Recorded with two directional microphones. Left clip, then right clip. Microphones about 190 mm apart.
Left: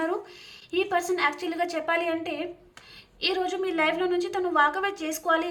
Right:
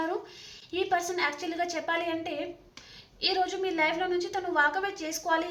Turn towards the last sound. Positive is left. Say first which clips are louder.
# left 3 dB
turn(degrees=10)  # may be behind; listen again after turning